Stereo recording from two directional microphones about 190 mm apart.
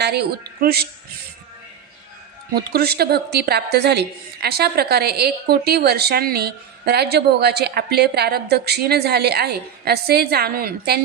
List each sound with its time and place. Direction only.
0.0 s a woman's voice: 60° right (ahead or behind)
2.6 s a woman's voice: 55° right (ahead or behind)